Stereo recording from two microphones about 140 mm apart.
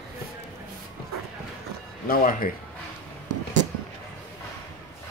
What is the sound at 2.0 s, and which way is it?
Speech, 90° left.